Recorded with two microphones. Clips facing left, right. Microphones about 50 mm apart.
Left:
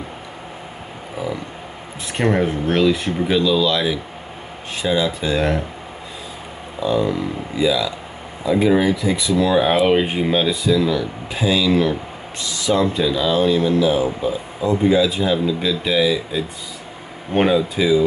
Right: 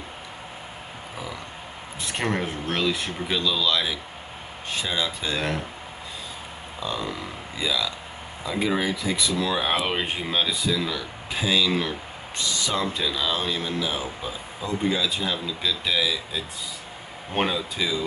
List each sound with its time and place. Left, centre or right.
1.1 s a sound: centre
2.1 s speech: centre
6.8 s speech: centre